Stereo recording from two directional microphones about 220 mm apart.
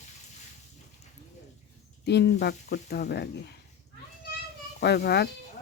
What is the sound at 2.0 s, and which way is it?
Speech, 50° left (ahead or behind).